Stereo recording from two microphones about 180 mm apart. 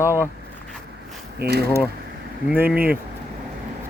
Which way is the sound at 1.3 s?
60° right (ahead or behind).